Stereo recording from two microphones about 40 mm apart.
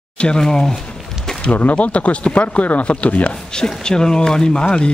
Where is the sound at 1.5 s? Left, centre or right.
Left.